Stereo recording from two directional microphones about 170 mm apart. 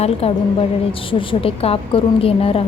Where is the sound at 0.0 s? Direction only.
35° left (ahead or behind).